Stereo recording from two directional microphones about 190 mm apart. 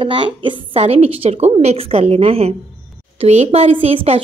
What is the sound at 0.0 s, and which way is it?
A woman's voice, 25° right (ahead or behind).